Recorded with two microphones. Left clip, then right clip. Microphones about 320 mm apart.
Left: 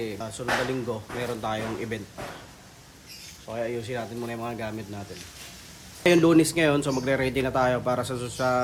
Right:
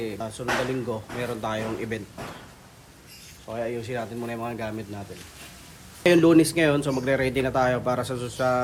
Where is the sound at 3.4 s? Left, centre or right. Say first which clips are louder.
Even; centre.